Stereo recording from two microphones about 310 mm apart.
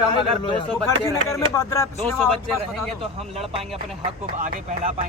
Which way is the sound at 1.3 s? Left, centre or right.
Centre.